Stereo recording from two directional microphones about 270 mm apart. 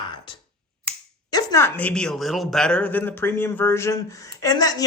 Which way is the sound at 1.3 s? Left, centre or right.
Centre.